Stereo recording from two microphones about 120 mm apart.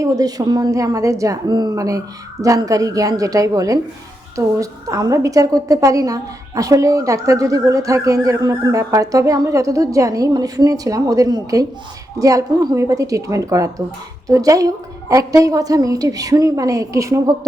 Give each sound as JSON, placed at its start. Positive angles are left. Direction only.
{"t": 0.0, "sound": "a woman's voice", "side_deg": -30}